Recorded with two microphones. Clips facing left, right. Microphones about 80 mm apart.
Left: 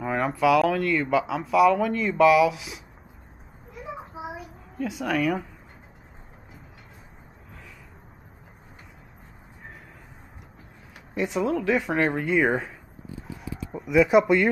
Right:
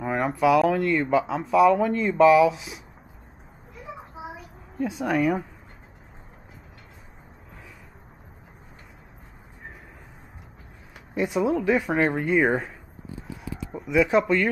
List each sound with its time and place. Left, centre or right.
0.0 s a sound: centre
0.6 s speech: centre
3.9 s a sound: centre
4.8 s speech: right
5.1 s speech: centre
11.1 s speech: centre